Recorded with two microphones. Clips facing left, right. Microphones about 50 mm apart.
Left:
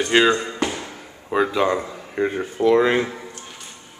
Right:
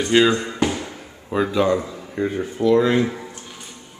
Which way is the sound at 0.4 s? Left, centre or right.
Centre.